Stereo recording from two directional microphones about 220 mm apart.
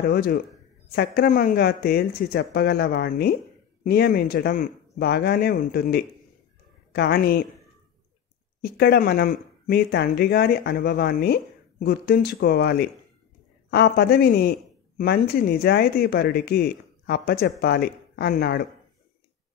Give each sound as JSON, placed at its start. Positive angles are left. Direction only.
{"t": 0.1, "sound": "a man's voice", "side_deg": 45}
{"t": 8.6, "sound": "a man's voice", "side_deg": 45}